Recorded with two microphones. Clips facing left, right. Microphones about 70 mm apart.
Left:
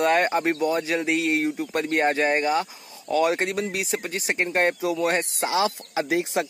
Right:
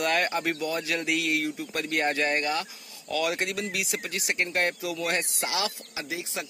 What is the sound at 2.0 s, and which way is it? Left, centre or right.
Speech, centre.